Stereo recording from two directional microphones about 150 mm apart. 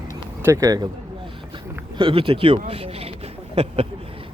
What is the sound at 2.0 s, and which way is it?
Speech, 35° right (ahead or behind).